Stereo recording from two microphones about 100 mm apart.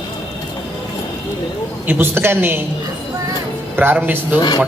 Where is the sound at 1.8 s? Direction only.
20° right (ahead or behind).